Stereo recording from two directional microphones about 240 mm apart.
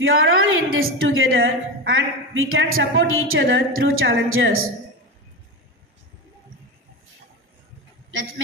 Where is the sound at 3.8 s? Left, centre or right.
Right.